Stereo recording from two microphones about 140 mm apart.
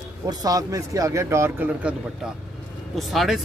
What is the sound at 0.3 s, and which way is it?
Speech, 25° right (ahead or behind).